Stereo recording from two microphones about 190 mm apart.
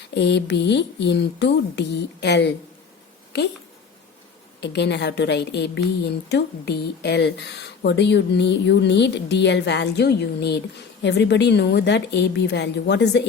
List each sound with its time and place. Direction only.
0.1 s a woman's voice: 65° left (ahead or behind)
4.6 s a woman's voice: 65° left (ahead or behind)